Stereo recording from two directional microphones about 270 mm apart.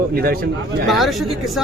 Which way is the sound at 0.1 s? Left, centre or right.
Right.